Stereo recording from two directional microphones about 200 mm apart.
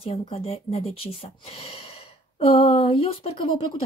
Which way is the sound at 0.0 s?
30° left (ahead or behind).